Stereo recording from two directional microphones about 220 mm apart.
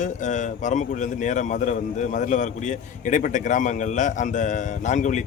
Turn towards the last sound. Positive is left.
turn(degrees=35)  # may be behind; listen again after turning